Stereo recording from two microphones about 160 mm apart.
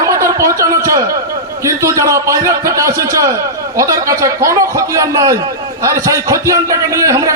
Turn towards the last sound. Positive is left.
turn(degrees=-20)  # may be behind; listen again after turning